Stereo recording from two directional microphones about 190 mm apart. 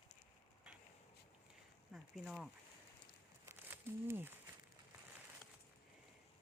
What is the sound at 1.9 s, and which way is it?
Speech, centre (ahead or behind).